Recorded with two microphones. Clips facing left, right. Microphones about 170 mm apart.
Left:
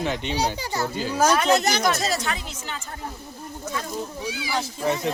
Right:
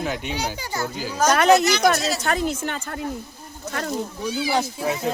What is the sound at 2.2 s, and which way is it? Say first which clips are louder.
Speech: right 8 dB; 50° right (ahead or behind).